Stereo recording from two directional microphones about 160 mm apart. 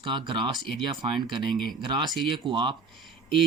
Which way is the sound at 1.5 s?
Centre (ahead or behind).